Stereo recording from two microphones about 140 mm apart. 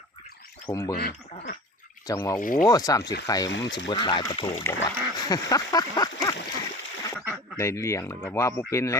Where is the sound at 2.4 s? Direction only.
75° left (ahead or behind).